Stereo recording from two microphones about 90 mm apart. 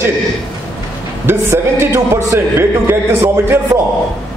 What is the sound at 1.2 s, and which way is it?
A man's voice, 30° right (ahead or behind).